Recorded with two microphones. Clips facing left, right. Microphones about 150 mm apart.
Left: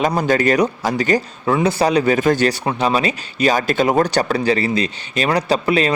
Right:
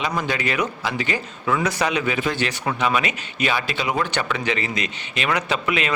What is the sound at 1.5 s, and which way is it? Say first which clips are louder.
Speech: left 7 dB; 30° left (ahead or behind).